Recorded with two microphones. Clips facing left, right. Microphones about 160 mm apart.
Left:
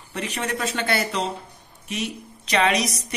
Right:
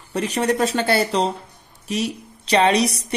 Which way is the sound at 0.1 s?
35° right (ahead or behind).